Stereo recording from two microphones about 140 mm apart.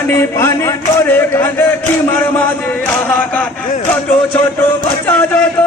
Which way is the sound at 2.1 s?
15° left (ahead or behind).